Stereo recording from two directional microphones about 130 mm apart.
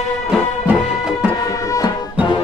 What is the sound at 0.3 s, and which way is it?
Music, 5° right (ahead or behind).